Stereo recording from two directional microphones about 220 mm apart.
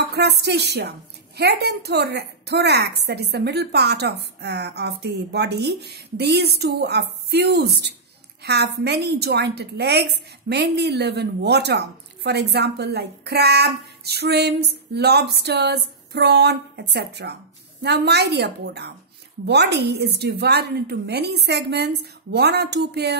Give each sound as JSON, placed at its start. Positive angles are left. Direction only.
{"t": 0.1, "sound": "a woman's voice", "side_deg": -50}